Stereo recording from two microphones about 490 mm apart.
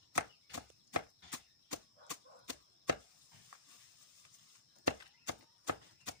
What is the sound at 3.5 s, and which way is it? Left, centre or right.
Horse, right.